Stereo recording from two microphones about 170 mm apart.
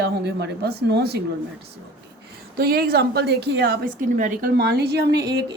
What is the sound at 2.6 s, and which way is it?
Speech, 65° right (ahead or behind).